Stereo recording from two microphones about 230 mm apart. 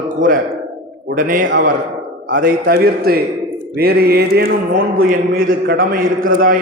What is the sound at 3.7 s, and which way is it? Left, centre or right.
Mantra, right.